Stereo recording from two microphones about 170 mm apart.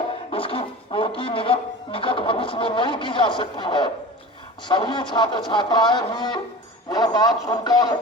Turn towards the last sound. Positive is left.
turn(degrees=25)  # may be behind; listen again after turning